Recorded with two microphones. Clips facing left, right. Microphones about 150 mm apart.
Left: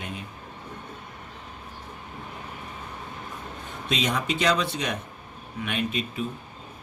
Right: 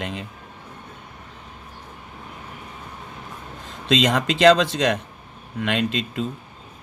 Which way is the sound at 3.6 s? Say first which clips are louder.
Right 8 dB; 90° right.